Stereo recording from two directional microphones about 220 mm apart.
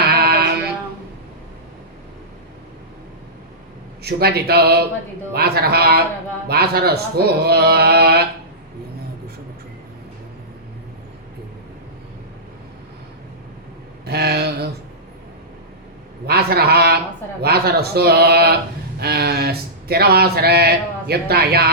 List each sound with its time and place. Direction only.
0.0 s sheep: 45° right (ahead or behind)
4.0 s speech: 45° right (ahead or behind)
14.0 s mantra: 45° right (ahead or behind)
16.2 s a sound: 45° right (ahead or behind)
17.4 s speech: 45° right (ahead or behind)